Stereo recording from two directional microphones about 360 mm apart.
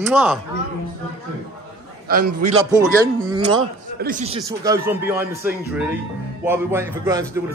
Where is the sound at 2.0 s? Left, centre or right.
Right.